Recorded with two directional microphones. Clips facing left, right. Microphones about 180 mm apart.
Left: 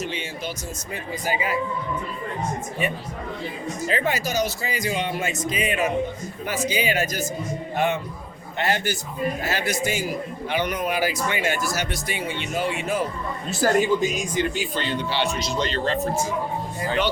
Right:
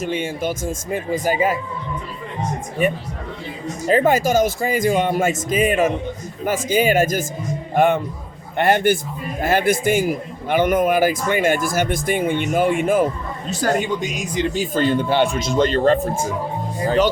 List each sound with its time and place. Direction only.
0.0 s speech: 50° right (ahead or behind)
3.8 s a man's voice: 45° right (ahead or behind)
13.5 s speech: 5° left (ahead or behind)
14.5 s speech: 45° right (ahead or behind)
16.8 s speech: 40° right (ahead or behind)